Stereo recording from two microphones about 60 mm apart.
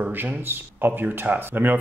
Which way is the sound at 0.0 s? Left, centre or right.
Right.